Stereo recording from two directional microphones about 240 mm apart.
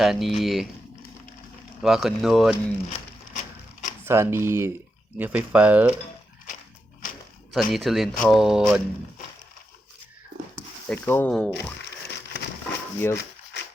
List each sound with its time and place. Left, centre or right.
0.0 s speech: centre
1.8 s speech: centre
2.9 s a sound: left
4.0 s speech: centre
7.5 s speech: centre
10.8 s speech: centre
11.8 s a sound: left